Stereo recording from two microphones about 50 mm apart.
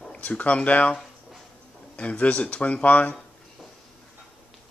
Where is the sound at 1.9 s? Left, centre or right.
Left.